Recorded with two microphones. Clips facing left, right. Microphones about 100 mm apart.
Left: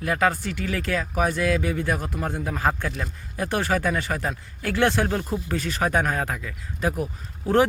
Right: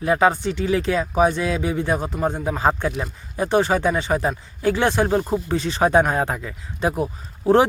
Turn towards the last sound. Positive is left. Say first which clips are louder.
# right 5 dB
turn(degrees=-30)  # may be behind; listen again after turning